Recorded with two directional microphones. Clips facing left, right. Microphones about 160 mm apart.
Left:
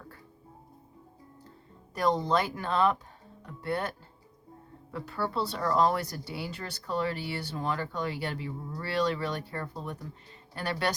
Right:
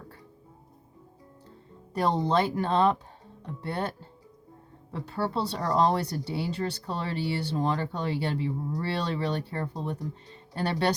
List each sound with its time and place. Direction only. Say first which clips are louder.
1.9 s speech: right 1 dB; 30° right (ahead or behind)
3.4 s music: even; 30° right (ahead or behind)
4.9 s speech: right 2 dB; 30° right (ahead or behind)